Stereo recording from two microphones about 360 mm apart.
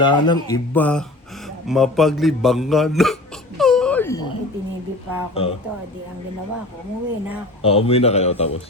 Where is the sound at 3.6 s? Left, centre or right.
Centre.